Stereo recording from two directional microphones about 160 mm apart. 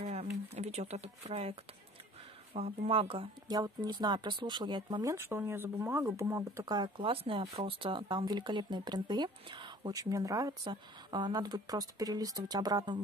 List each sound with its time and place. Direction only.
0.0 s a sound: 40° right (ahead or behind)
0.6 s speech: 40° right (ahead or behind)
5.1 s speech: 15° right (ahead or behind)